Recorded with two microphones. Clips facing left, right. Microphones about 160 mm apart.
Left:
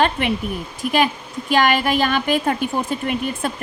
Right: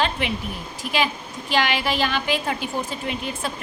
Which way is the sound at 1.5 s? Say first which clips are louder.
Left 5 dB; 50° left (ahead or behind).